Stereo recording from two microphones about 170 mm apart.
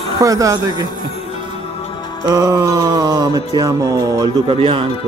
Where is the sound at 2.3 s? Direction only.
25° right (ahead or behind).